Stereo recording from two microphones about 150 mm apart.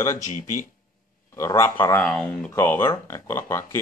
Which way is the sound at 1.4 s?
20° left (ahead or behind).